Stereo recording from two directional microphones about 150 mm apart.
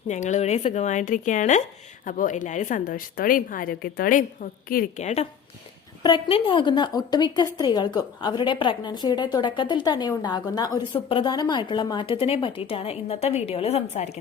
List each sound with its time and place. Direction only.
0.1 s a woman's voice: 55° left (ahead or behind)
4.9 s speech: 50° left (ahead or behind)
6.0 s a woman's voice: 30° left (ahead or behind); by 14.2 s 45° left (ahead or behind)